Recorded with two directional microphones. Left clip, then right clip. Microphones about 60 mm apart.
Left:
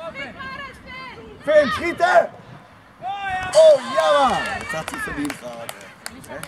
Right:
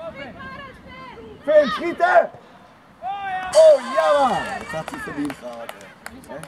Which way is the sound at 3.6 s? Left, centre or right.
Left.